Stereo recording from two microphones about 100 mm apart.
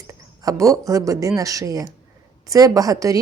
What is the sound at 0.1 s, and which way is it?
A woman's voice, 30° right (ahead or behind).